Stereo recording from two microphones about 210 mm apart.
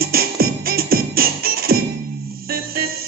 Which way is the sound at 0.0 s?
45° right (ahead or behind).